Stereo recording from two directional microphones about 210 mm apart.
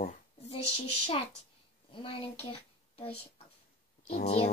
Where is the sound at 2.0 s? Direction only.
25° left (ahead or behind).